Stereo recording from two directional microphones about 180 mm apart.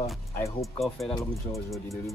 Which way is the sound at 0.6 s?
Centre (ahead or behind).